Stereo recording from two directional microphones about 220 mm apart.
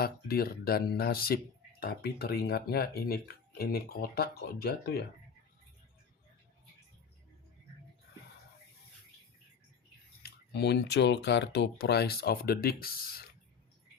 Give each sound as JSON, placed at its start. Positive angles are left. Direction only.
{"t": 0.0, "sound": "speech", "side_deg": 45}
{"t": 10.2, "sound": "speech", "side_deg": 50}